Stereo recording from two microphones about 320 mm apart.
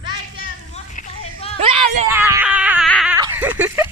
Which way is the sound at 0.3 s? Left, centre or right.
Left.